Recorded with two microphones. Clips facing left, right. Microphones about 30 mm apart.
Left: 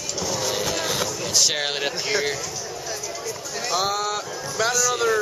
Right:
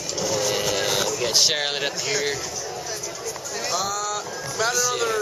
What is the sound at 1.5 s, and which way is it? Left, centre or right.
Speech, centre.